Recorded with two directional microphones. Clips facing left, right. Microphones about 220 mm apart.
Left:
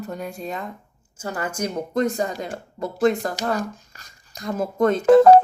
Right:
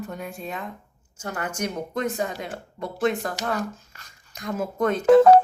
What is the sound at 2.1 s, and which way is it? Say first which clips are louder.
Speech: left 3 dB; 5° right (ahead or behind).